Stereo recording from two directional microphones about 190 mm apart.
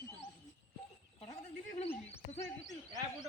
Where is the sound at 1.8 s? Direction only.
35° left (ahead or behind).